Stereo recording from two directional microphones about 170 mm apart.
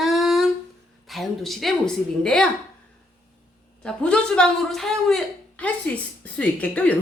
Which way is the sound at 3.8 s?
5° left (ahead or behind).